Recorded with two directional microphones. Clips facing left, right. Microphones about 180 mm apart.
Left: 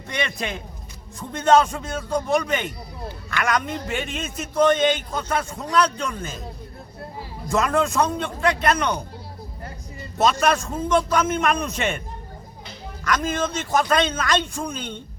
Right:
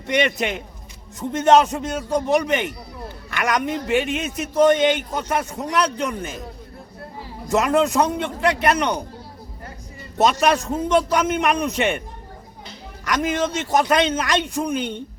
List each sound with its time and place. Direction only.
0.1 s a man's voice: 20° right (ahead or behind)
7.4 s a man's voice: 20° right (ahead or behind)
10.2 s a man's voice: 15° right (ahead or behind)
13.1 s a man's voice: 15° right (ahead or behind)